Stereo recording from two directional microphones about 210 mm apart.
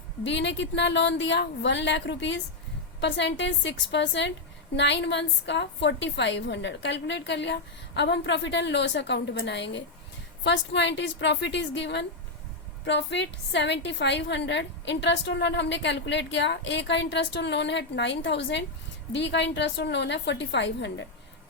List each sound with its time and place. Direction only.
0.3 s a woman's voice: 55° left (ahead or behind)